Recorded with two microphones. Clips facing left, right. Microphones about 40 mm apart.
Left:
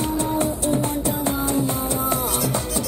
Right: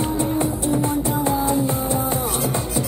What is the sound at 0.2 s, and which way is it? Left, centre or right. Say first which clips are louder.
Music: right 1 dB; left.